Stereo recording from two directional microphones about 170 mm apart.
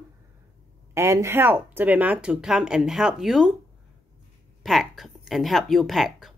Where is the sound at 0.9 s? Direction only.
15° right (ahead or behind).